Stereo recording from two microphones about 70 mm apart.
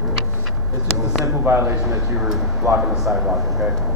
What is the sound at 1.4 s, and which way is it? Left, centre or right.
Speech, right.